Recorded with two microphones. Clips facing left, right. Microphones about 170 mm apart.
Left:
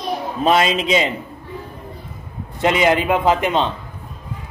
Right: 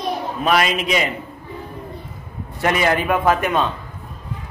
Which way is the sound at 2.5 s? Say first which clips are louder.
Left 2 dB; 20° left (ahead or behind).